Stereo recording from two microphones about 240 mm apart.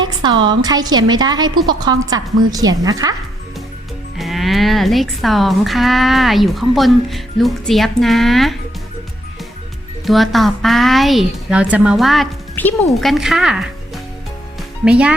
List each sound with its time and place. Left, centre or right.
0.0 s a woman's voice: centre
4.2 s speech: centre
10.1 s speech: centre